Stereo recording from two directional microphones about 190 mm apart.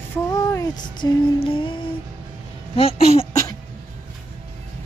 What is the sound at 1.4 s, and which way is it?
Speech, 30° left (ahead or behind).